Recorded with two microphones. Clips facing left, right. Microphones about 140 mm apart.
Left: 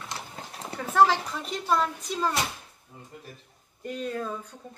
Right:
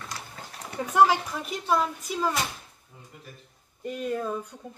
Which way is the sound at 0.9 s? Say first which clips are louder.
Right 1 dB; 10° right (ahead or behind).